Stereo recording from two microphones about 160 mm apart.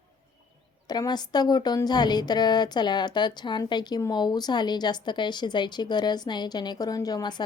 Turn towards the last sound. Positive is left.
turn(degrees=25)  # may be behind; listen again after turning